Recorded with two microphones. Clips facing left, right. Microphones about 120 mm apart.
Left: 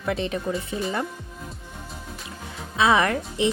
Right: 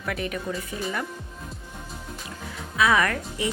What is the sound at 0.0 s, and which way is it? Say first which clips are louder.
Speech: left 4 dB; 25° left (ahead or behind).